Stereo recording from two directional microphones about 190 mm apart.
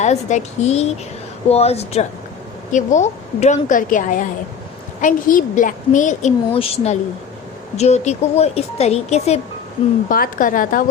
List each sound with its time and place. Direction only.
0.0 s a woman's voice: 40° left (ahead or behind)
10.1 s a woman's voice: 45° left (ahead or behind)